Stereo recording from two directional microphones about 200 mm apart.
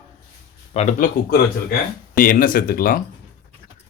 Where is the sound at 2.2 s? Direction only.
45° left (ahead or behind).